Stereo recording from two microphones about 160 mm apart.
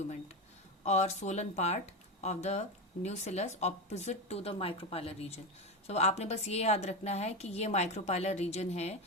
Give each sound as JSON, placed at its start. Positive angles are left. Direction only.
{"t": 0.9, "sound": "speech", "side_deg": 45}